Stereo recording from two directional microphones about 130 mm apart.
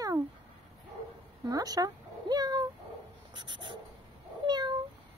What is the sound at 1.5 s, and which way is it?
Meow, 30° right (ahead or behind).